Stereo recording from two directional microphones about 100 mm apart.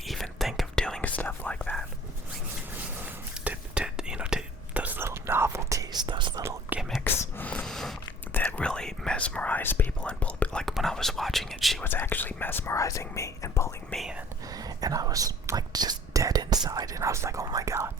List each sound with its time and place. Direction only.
0.0 s whispering: centre (ahead or behind)
3.0 s whispering: 15° right (ahead or behind); by 6.4 s 50° right (ahead or behind)
7.0 s whispering: 15° left (ahead or behind)
7.6 s a sound: 5° left (ahead or behind)
8.3 s whispering: 15° left (ahead or behind); by 11.8 s centre (ahead or behind)
11.8 s whispering: 20° left (ahead or behind)
13.9 s whispering: centre (ahead or behind)
14.5 s whispering: 40° right (ahead or behind)